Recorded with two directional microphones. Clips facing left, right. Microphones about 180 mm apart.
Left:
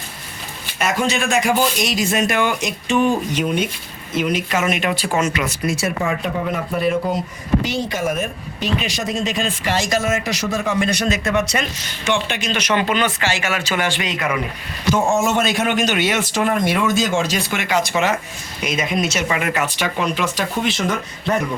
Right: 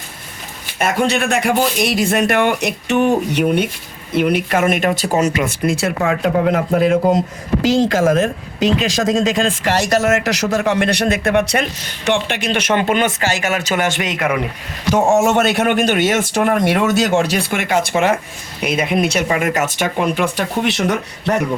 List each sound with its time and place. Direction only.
0.8 s speech: 55° right (ahead or behind)
15.1 s speech: 65° right (ahead or behind)
16.6 s speech: 70° right (ahead or behind)
19.3 s speech: 45° right (ahead or behind)
20.3 s speech: 70° right (ahead or behind)